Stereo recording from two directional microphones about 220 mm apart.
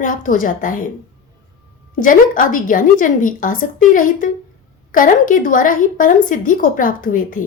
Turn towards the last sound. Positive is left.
turn(degrees=35)  # may be behind; listen again after turning